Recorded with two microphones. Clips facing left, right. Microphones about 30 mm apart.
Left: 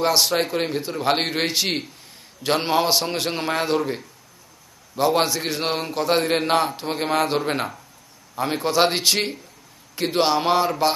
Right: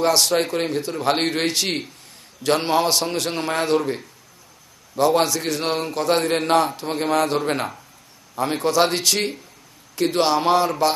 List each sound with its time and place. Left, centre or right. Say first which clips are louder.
0.0 s a man's voice: right 1 dB; centre
7.4 s a man's voice: right 1 dB; centre
8.6 s a man's voice: even; centre